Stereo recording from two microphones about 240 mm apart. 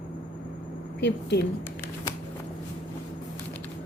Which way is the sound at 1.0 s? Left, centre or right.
Left.